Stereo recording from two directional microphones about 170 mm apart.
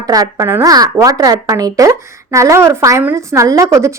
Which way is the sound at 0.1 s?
20° right (ahead or behind).